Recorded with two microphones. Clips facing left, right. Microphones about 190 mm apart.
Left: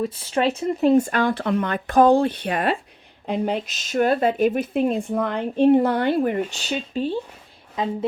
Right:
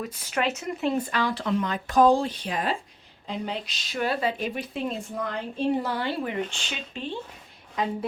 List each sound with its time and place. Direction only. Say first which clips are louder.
0.0 s speech: left 6 dB; 30° left (ahead or behind); by 6.4 s 50° left (ahead or behind)
6.5 s speech: left 10 dB; 40° left (ahead or behind)